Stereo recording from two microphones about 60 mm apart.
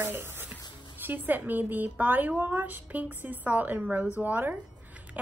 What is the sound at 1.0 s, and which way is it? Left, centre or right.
A woman's voice, right.